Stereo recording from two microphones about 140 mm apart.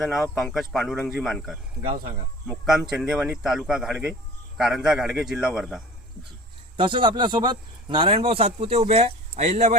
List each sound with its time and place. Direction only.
0.0 s a man's voice: centre (ahead or behind)
6.7 s a man's voice: 35° right (ahead or behind); by 9.7 s 50° right (ahead or behind)